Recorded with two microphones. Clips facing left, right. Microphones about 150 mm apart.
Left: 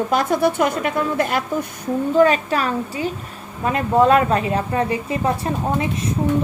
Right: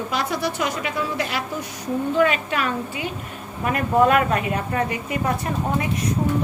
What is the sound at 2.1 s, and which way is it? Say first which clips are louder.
A woman's voice: left 6 dB; 40° left (ahead or behind).